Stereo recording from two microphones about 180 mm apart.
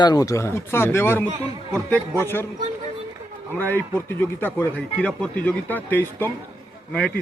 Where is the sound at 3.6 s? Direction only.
10° left (ahead or behind).